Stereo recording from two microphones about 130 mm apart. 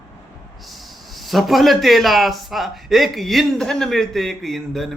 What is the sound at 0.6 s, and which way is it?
A man's voice, centre (ahead or behind).